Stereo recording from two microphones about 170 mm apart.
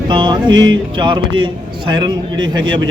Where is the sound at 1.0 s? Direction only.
30° right (ahead or behind).